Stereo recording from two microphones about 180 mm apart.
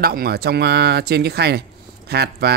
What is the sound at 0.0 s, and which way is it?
Speech, 60° right (ahead or behind).